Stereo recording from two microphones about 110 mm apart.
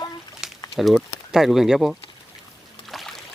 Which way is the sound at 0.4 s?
5° right (ahead or behind).